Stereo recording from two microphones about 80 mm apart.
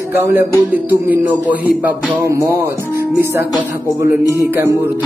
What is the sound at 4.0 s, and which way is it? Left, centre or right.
Music, right.